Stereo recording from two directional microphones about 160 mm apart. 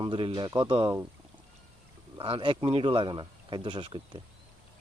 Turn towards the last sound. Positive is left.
turn(degrees=-30)  # may be behind; listen again after turning